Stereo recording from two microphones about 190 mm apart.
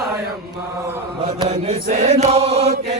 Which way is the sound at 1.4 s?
30° right (ahead or behind).